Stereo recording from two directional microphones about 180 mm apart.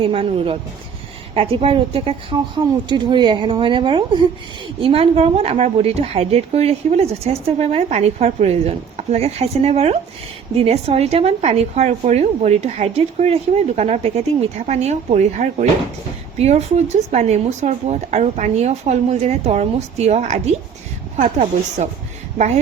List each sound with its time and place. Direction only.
0.0 s a woman's voice: 30° right (ahead or behind)